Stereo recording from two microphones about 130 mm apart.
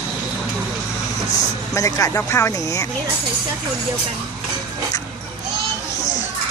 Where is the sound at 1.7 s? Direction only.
25° left (ahead or behind).